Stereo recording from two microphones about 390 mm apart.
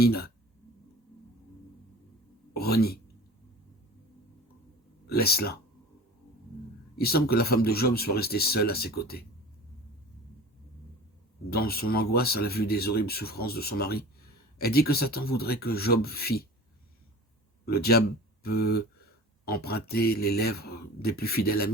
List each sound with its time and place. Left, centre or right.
0.0 s speech: left
2.6 s speech: left
5.0 s speech: left
6.9 s speech: left
11.5 s speech: left
17.7 s speech: left